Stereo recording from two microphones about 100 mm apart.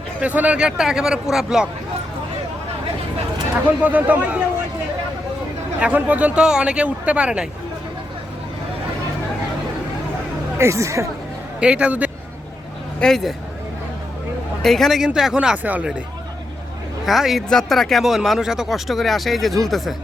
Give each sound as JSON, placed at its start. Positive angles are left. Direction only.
{"t": 0.2, "sound": "speech", "side_deg": -15}
{"t": 3.8, "sound": "speech", "side_deg": -15}
{"t": 5.8, "sound": "speech", "side_deg": -15}
{"t": 10.6, "sound": "speech", "side_deg": -30}
{"t": 11.6, "sound": "speech", "side_deg": -10}
{"t": 13.0, "sound": "speech", "side_deg": 5}
{"t": 14.6, "sound": "speech", "side_deg": 0}
{"t": 15.6, "sound": "speech", "side_deg": -15}
{"t": 17.1, "sound": "speech", "side_deg": 0}